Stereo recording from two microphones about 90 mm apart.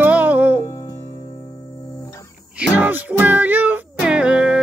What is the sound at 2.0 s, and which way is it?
Guitar, 35° left (ahead or behind).